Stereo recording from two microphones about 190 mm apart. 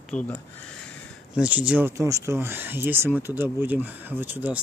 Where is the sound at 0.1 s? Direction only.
5° left (ahead or behind).